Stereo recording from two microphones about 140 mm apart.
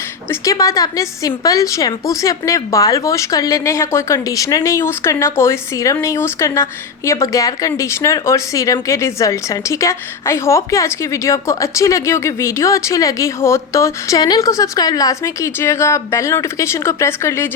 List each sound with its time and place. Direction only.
0.3 s a woman's voice: 25° left (ahead or behind)